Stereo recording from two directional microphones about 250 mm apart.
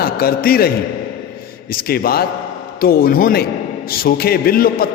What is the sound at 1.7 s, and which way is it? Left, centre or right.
A man's voice, left.